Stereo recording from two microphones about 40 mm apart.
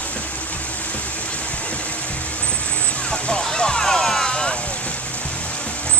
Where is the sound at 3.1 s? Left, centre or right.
Centre.